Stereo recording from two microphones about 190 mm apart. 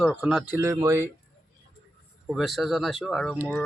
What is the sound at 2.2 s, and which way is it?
A woman's voice, centre (ahead or behind).